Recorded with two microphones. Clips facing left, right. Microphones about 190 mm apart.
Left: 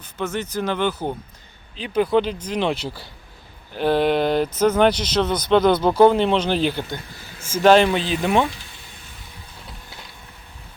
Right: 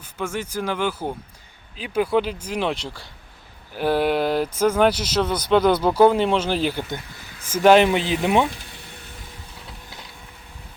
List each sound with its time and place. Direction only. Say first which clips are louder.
0.0 s speech: left 2 dB; 10° right (ahead or behind)
3.8 s speech: left 2 dB; 5° right (ahead or behind)